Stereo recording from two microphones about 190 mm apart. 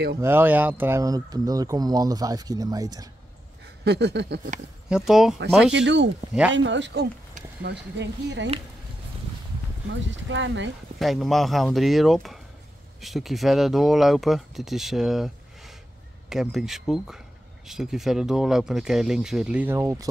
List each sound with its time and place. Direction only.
0.2 s speech: 10° right (ahead or behind)
3.8 s speech: 60° right (ahead or behind)
4.8 s speech: 5° right (ahead or behind)
5.7 s speech: 70° right (ahead or behind)
9.8 s speech: 80° right
11.0 s speech: centre (ahead or behind)